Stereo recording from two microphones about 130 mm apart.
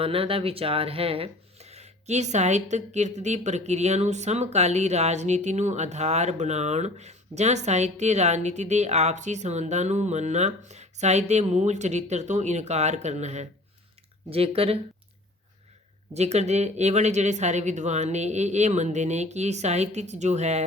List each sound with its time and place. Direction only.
0.0 s speech: 45° right (ahead or behind)
14.3 s speech: 50° right (ahead or behind)
16.1 s speech: 60° right (ahead or behind)